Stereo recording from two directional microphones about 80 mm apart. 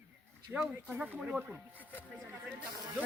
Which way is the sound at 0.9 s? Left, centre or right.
Right.